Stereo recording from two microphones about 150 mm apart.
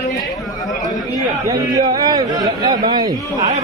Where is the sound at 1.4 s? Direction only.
20° right (ahead or behind).